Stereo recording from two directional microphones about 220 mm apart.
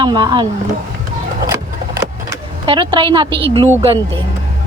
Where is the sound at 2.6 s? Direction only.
20° right (ahead or behind).